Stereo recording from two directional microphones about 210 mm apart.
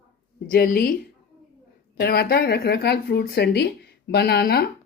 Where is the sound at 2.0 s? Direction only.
50° left (ahead or behind).